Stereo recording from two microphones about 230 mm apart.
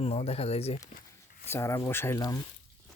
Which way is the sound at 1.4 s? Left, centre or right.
Centre.